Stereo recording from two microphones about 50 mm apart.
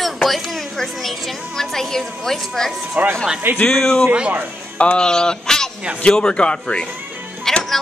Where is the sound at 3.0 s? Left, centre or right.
Right.